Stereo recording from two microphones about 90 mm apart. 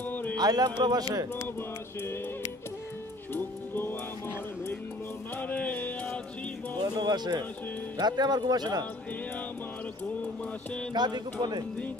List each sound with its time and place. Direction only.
0.1 s a sound: 20° left (ahead or behind)
0.4 s speech: 45° right (ahead or behind)
3.3 s music: 25° left (ahead or behind)
5.4 s music: 15° left (ahead or behind)
6.8 s music: 50° right (ahead or behind)
8.0 s speech: 50° right (ahead or behind)
10.9 s speech: 55° right (ahead or behind)